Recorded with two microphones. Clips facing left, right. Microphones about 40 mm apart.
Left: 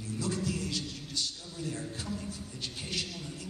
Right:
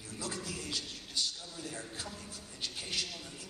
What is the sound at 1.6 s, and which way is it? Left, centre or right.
A man's voice, centre.